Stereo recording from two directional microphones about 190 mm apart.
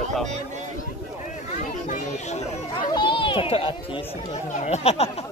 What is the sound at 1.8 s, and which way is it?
Children playing, 40° left (ahead or behind).